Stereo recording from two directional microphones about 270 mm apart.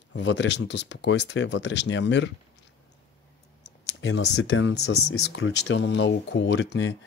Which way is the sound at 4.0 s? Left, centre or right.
Left.